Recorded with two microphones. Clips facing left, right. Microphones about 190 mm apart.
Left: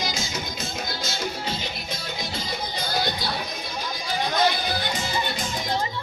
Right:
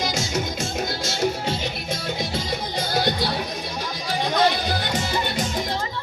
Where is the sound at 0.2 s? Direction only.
75° right (ahead or behind).